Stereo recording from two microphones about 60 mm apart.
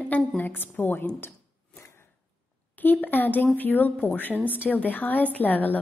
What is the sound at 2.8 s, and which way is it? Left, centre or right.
A woman's voice, left.